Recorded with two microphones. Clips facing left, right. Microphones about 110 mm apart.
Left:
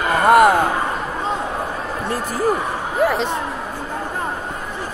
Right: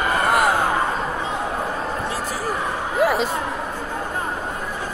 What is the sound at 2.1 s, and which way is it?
Speech, 50° left (ahead or behind).